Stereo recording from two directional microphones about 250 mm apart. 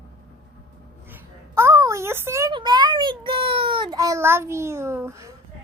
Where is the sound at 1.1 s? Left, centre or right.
Centre.